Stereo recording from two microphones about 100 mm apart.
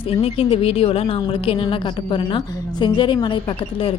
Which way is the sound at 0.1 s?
75° left (ahead or behind).